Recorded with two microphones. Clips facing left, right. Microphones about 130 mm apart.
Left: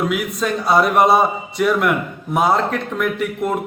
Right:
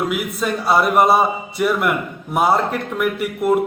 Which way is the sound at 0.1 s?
5° right (ahead or behind).